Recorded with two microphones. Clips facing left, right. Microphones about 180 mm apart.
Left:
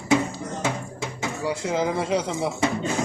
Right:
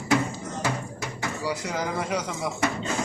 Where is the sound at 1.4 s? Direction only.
25° left (ahead or behind).